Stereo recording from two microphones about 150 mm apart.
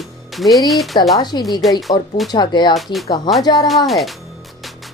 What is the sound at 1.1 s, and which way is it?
Speech, 30° left (ahead or behind).